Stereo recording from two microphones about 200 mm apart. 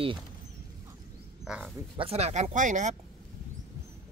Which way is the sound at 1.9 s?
30° right (ahead or behind).